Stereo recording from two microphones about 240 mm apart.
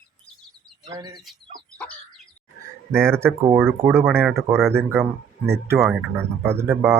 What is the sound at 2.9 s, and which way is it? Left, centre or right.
Speech, centre.